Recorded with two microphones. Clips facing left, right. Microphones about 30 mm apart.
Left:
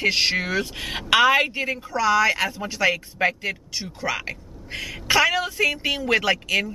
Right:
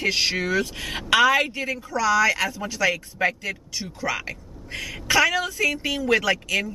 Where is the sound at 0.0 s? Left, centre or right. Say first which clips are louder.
Left 2 dB; centre.